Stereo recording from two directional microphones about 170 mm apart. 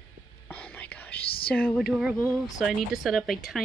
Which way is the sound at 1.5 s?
5° left (ahead or behind).